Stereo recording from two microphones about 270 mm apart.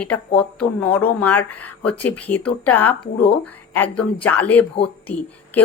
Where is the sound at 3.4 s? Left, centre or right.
Centre.